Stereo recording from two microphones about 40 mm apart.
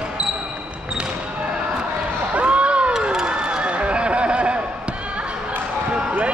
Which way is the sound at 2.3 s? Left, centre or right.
Right.